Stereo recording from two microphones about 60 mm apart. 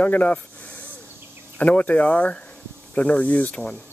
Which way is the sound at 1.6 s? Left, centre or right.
Left.